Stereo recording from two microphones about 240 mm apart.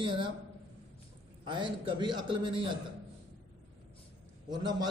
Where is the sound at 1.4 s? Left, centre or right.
Centre.